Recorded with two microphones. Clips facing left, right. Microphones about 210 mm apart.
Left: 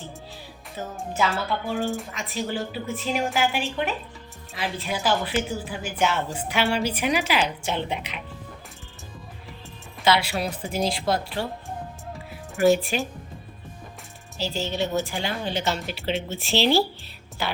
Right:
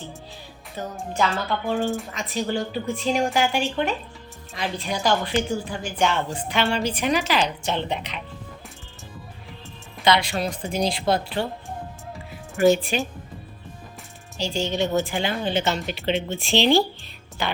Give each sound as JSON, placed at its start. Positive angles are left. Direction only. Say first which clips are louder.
{"t": 0.9, "sound": "a woman's voice", "louder": "right 1 dB", "side_deg": 5}
{"t": 10.0, "sound": "a woman's voice", "louder": "right 1 dB", "side_deg": 5}
{"t": 12.5, "sound": "a woman's voice", "louder": "right 1 dB", "side_deg": 0}
{"t": 14.3, "sound": "a woman's voice", "louder": "right 3 dB", "side_deg": 5}
{"t": 15.2, "sound": "speech", "louder": "right 4 dB", "side_deg": -20}
{"t": 15.6, "sound": "a woman's voice", "louder": "right 2 dB", "side_deg": 0}